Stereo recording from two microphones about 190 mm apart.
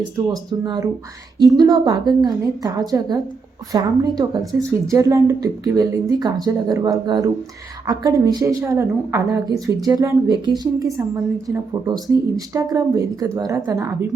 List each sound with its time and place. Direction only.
0.3 s a woman's voice: 20° right (ahead or behind)